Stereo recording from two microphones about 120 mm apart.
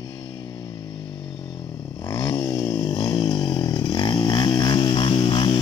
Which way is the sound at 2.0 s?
40° left (ahead or behind).